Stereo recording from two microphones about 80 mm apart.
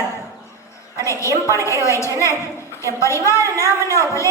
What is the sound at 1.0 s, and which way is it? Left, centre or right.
Speech, left.